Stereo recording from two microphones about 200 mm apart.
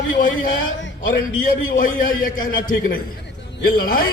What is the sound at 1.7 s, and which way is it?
A man's voice, 45° left (ahead or behind).